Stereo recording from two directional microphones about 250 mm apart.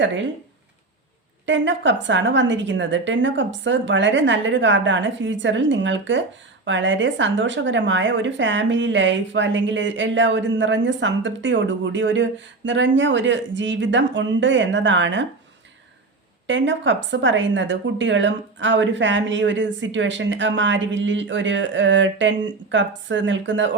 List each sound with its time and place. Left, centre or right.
0.0 s a woman's voice: right
1.5 s a woman's voice: right
16.5 s a woman's voice: right